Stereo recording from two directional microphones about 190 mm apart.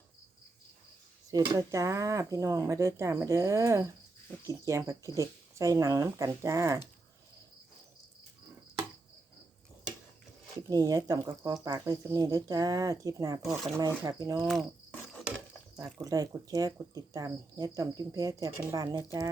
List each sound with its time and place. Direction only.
1.3 s speech: 20° right (ahead or behind)
10.7 s speech: 20° right (ahead or behind)
13.4 s speech: centre (ahead or behind)
13.7 s speech: 20° right (ahead or behind)
14.4 s speech: centre (ahead or behind)
16.0 s speech: 20° right (ahead or behind)